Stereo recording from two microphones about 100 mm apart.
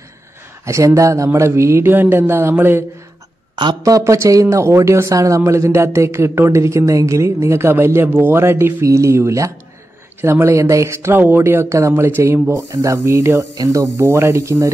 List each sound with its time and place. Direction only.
0.7 s speech: 30° right (ahead or behind)
3.8 s speech: 35° right (ahead or behind)